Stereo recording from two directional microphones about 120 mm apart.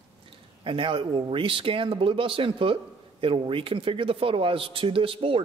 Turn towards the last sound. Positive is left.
turn(degrees=-50)  # may be behind; listen again after turning